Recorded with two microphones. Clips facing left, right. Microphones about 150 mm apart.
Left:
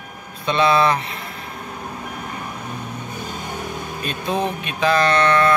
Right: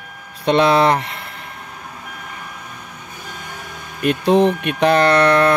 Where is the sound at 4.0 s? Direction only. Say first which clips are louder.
Right 10 dB; 70° right (ahead or behind).